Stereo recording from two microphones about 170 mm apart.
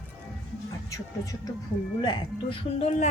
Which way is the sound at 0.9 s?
20° left (ahead or behind).